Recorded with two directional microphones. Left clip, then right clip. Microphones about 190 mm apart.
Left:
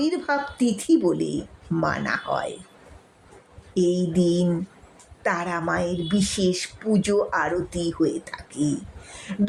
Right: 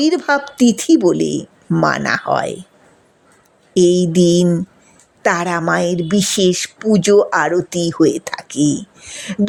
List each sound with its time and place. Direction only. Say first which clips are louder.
0.0 s a woman's voice: right 9 dB; 40° right (ahead or behind)
3.8 s a woman's voice: right 10 dB; 40° right (ahead or behind)